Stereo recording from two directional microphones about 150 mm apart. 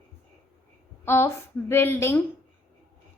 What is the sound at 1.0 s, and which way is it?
A woman's voice, 15° left (ahead or behind).